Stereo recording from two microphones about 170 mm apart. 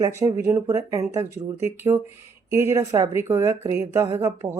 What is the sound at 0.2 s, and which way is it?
Speech, 15° right (ahead or behind).